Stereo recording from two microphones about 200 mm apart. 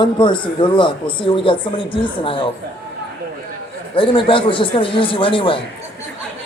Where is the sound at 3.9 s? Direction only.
25° left (ahead or behind).